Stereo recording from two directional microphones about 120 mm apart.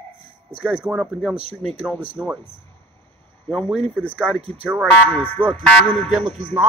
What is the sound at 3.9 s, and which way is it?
Speech, 10° left (ahead or behind).